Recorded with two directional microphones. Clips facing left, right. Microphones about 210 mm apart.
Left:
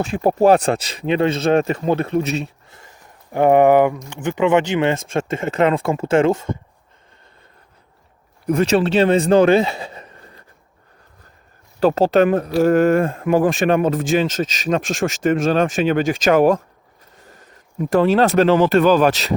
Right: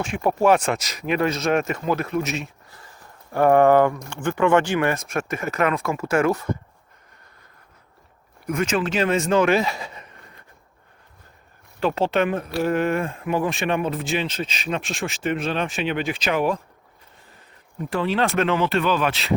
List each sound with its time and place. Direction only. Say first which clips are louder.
0.0 s speech: left 5 dB; 35° left (ahead or behind)
8.4 s speech: left 7 dB; 35° left (ahead or behind)
11.8 s speech: left 7 dB; 40° left (ahead or behind)
17.8 s speech: left 8 dB; 45° left (ahead or behind)